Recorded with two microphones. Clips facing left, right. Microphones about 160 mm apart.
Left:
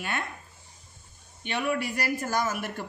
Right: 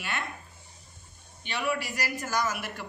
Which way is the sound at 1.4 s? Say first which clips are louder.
Left 2 dB; 50° left (ahead or behind).